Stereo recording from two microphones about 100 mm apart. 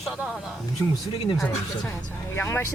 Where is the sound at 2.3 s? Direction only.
20° left (ahead or behind).